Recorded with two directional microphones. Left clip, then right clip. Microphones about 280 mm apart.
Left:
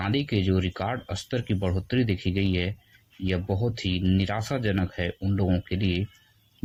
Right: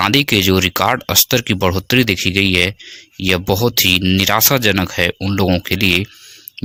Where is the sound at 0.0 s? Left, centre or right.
Right.